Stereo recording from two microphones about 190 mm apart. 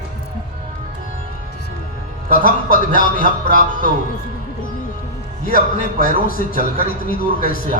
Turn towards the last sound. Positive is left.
turn(degrees=50)  # may be behind; listen again after turning